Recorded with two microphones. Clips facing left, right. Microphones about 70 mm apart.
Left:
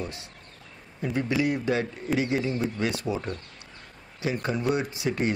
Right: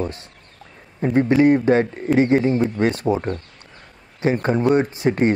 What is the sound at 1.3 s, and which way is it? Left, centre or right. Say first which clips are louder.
Speech: right 11 dB; right.